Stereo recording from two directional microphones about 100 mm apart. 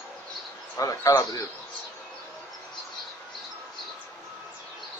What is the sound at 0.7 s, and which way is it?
Speech, 35° left (ahead or behind).